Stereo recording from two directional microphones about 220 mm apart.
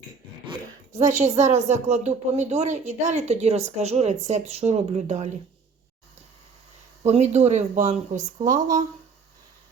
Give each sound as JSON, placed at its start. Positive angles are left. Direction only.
{"t": 0.9, "sound": "speech", "side_deg": -30}
{"t": 7.0, "sound": "speech", "side_deg": -30}